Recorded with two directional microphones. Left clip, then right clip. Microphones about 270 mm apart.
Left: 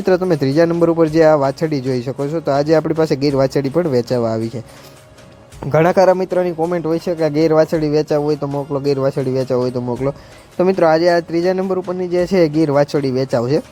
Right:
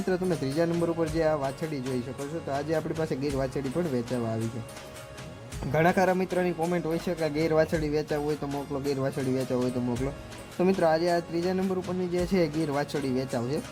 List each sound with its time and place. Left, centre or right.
0.0 s speech: left
5.7 s speech: left